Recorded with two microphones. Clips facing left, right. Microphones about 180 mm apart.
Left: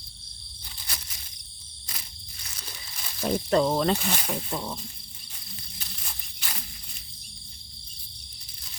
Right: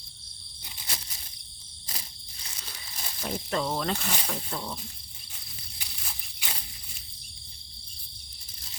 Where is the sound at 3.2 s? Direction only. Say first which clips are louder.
Left 7 dB; 35° left (ahead or behind).